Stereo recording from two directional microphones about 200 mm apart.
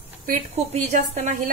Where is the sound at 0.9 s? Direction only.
35° right (ahead or behind).